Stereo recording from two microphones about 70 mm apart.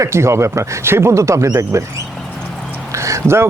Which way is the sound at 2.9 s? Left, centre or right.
Right.